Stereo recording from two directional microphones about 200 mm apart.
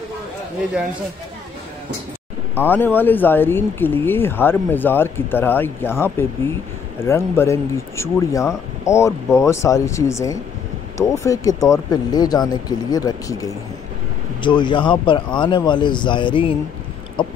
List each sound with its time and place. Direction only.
2.5 s a man's voice: 10° left (ahead or behind)